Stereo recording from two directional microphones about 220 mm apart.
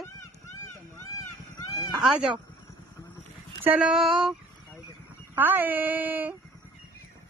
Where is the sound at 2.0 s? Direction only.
5° right (ahead or behind).